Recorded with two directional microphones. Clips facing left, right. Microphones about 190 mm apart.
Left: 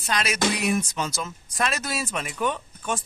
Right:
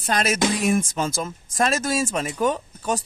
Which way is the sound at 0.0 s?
45° right (ahead or behind).